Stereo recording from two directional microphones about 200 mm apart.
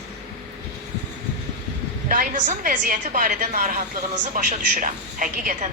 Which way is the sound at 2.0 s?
45° right (ahead or behind).